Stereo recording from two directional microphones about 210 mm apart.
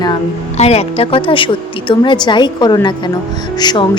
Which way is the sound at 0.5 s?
30° left (ahead or behind).